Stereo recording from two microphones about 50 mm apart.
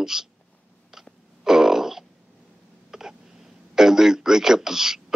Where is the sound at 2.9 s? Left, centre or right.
Centre.